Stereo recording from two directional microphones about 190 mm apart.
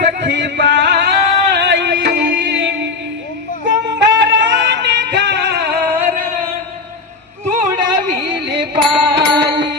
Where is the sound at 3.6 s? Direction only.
70° right (ahead or behind).